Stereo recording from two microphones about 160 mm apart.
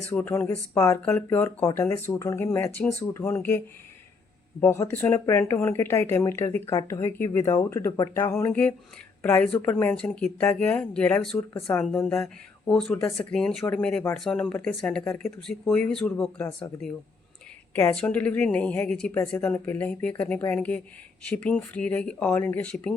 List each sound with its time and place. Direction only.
0.1 s speech: 15° left (ahead or behind)
4.6 s speech: 15° left (ahead or behind)
12.9 s speech: 15° left (ahead or behind)
13.3 s speech: 5° left (ahead or behind)
15.0 s speech: 15° left (ahead or behind)
15.4 s speech: 5° left (ahead or behind)
17.7 s speech: 10° left (ahead or behind)